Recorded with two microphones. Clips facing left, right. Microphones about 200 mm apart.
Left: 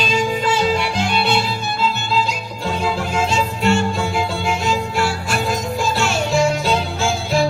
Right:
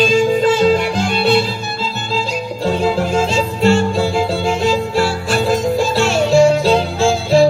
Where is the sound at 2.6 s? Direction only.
35° right (ahead or behind).